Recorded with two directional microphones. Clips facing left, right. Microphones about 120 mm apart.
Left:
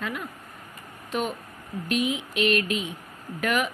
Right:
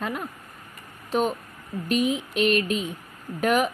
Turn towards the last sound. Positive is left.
turn(degrees=-40)  # may be behind; listen again after turning